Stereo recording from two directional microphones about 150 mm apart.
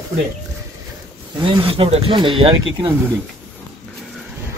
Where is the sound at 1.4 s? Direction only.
35° right (ahead or behind).